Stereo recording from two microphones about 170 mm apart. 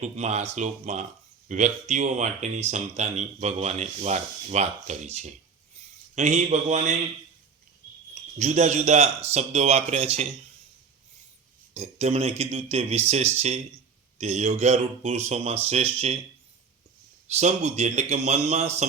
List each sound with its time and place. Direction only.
0.0 s speech: 40° right (ahead or behind)
8.1 s speech: 40° right (ahead or behind)
11.7 s speech: 40° right (ahead or behind)
17.3 s speech: 40° right (ahead or behind)